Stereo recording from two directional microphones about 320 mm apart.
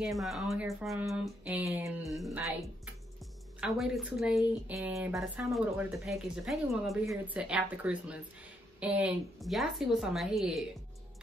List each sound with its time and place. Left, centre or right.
0.0 s a woman's voice: centre